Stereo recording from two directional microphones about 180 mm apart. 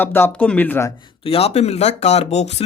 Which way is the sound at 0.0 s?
10° left (ahead or behind).